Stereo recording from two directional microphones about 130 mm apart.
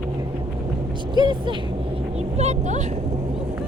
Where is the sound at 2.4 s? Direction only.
60° right (ahead or behind).